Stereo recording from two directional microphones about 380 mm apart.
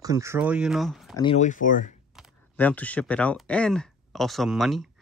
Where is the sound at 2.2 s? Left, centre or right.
Centre.